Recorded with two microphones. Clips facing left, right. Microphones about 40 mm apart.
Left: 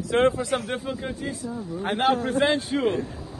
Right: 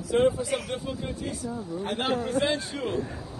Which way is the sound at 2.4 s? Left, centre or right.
Left.